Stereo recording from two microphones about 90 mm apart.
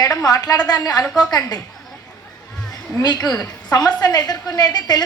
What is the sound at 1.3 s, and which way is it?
Speech, 45° left (ahead or behind).